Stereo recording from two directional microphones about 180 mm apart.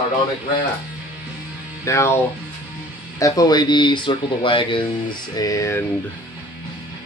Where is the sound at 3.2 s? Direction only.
20° left (ahead or behind).